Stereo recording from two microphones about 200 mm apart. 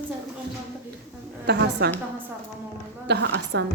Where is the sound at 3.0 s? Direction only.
60° right (ahead or behind).